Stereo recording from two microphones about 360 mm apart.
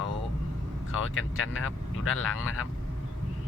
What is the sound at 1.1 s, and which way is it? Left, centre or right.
Speech, left.